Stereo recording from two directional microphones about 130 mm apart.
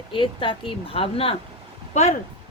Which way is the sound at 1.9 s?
60° left (ahead or behind).